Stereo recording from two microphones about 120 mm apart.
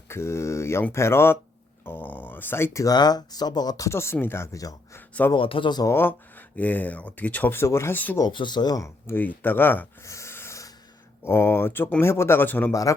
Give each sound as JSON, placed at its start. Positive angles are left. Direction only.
{"t": 0.1, "sound": "speech", "side_deg": 20}
{"t": 5.3, "sound": "speech", "side_deg": 45}
{"t": 5.9, "sound": "speech", "side_deg": 20}
{"t": 8.2, "sound": "speech", "side_deg": 40}
{"t": 9.0, "sound": "speech", "side_deg": 15}